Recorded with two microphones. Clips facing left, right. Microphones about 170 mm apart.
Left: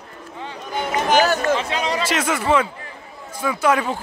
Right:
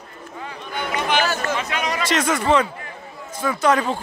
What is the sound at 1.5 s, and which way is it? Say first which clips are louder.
Speech: left 3 dB; 30° left (ahead or behind).